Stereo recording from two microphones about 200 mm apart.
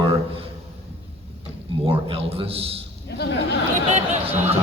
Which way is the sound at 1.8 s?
30° right (ahead or behind).